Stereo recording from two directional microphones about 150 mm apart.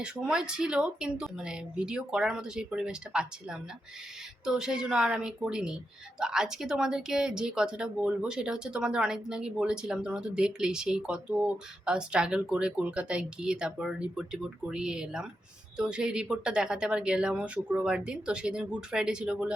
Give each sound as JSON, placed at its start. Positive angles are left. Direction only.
{"t": 0.0, "sound": "speech", "side_deg": -5}